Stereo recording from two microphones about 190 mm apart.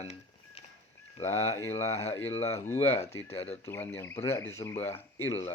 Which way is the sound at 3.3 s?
30° left (ahead or behind).